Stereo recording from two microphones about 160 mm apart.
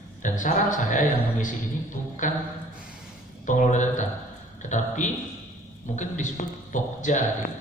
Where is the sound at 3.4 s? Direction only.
50° left (ahead or behind).